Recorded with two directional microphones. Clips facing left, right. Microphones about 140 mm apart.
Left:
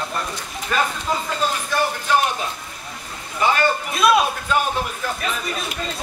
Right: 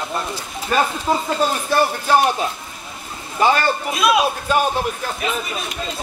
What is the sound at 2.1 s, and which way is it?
Speech, 35° right (ahead or behind).